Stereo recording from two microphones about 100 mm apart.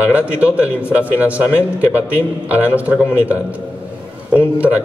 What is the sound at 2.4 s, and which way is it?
Speech, 15° right (ahead or behind).